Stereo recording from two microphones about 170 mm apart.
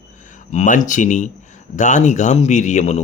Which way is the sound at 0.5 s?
45° left (ahead or behind).